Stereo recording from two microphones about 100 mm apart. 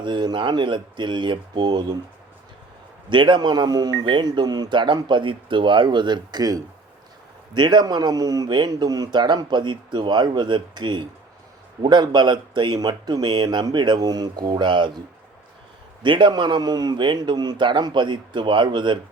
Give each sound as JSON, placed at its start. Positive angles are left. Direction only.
{"t": 0.0, "sound": "a man's voice", "side_deg": -50}
{"t": 3.1, "sound": "a man's voice", "side_deg": -50}
{"t": 16.0, "sound": "a man's voice", "side_deg": -55}